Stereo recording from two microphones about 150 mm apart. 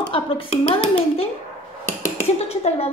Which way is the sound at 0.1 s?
40° left (ahead or behind).